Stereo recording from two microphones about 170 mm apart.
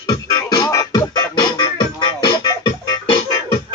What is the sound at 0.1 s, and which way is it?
Music, 20° left (ahead or behind).